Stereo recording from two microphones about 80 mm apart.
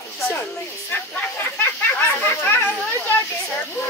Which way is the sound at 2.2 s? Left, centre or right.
Left.